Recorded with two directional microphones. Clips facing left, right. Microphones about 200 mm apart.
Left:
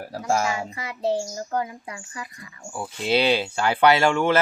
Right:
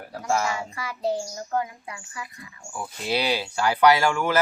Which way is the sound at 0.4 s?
20° left (ahead or behind).